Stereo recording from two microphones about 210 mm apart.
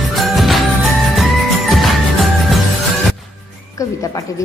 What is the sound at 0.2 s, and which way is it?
Music, centre (ahead or behind).